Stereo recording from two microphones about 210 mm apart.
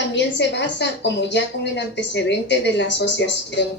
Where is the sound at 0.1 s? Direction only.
55° left (ahead or behind).